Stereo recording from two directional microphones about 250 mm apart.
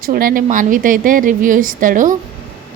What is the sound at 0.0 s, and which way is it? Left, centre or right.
A woman's voice, right.